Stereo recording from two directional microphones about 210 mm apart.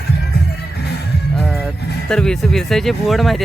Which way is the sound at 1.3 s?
Centre (ahead or behind).